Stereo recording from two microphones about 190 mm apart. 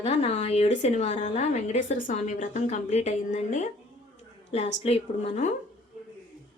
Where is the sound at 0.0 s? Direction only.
35° left (ahead or behind).